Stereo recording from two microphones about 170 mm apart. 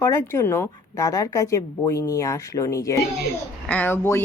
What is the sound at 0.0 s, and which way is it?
A woman's voice, 15° left (ahead or behind).